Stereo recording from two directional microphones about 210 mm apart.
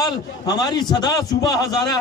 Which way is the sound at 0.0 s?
20° left (ahead or behind).